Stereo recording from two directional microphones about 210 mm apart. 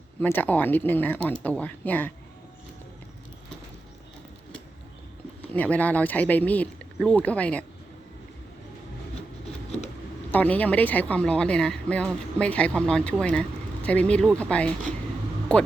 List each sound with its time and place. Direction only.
0.2 s speech: 10° left (ahead or behind)
5.4 s speech: 5° left (ahead or behind)
10.3 s a woman's voice: 5° left (ahead or behind)